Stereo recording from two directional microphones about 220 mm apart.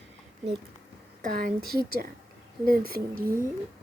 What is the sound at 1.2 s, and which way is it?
Speech, 40° right (ahead or behind).